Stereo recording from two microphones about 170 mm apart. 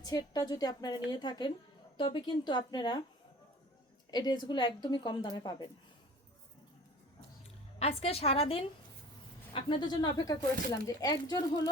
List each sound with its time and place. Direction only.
0.0 s a woman's voice: 20° left (ahead or behind)
4.1 s a woman's voice: 25° left (ahead or behind)
7.8 s a woman's voice: 35° left (ahead or behind)